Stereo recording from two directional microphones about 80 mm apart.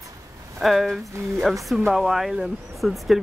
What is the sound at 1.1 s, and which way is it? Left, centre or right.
Speech, right.